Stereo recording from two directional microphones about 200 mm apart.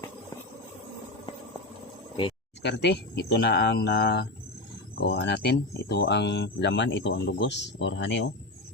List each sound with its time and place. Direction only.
2.6 s speech: 60° left (ahead or behind)